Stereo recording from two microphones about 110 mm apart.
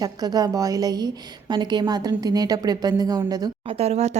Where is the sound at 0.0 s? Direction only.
35° right (ahead or behind).